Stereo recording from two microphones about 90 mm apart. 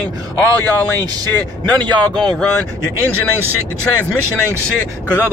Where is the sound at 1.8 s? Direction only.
55° right (ahead or behind).